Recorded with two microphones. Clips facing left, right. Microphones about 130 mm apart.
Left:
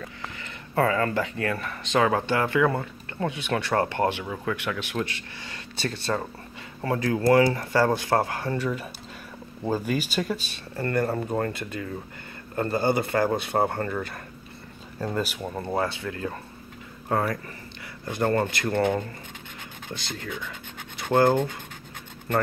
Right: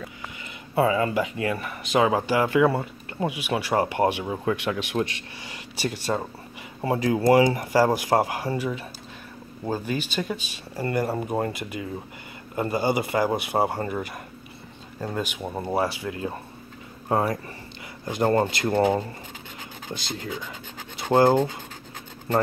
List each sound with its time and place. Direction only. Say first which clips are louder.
0.7 s speech: right 2 dB; 15° right (ahead or behind)
4.2 s speech: right 4 dB; 25° right (ahead or behind); by 8.8 s 5° right (ahead or behind)
9.8 s speech: left 1 dB; 5° left (ahead or behind)
10.8 s speech: even; 10° right (ahead or behind)
15.0 s speech: left 1 dB; centre (ahead or behind); by 18.7 s 25° right (ahead or behind)
18.7 s speech: right 2 dB; 10° right (ahead or behind)
21.0 s speech: right 2 dB; 30° right (ahead or behind)